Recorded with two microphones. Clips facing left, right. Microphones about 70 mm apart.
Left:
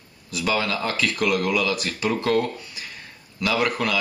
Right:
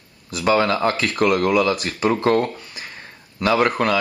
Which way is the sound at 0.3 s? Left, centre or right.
Right.